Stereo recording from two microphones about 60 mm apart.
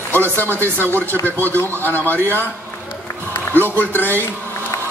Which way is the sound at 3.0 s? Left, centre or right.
Left.